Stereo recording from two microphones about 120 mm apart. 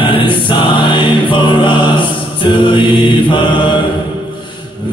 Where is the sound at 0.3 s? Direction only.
45° left (ahead or behind).